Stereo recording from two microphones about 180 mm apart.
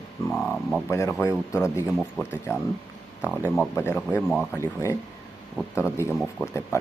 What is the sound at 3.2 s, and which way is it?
Speech, 15° left (ahead or behind).